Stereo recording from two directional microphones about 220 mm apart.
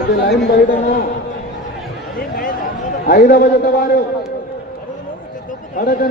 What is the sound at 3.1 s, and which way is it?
Speech, 45° left (ahead or behind).